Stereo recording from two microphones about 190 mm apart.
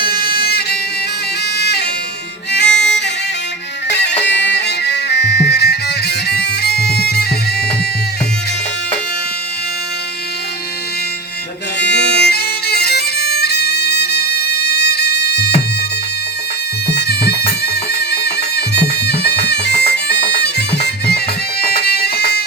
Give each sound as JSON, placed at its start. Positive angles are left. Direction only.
{"t": 0.0, "sound": "music", "side_deg": 55}
{"t": 2.6, "sound": "music", "side_deg": 5}
{"t": 3.8, "sound": "music", "side_deg": 65}
{"t": 11.8, "sound": "music", "side_deg": 65}
{"t": 16.9, "sound": "music", "side_deg": 60}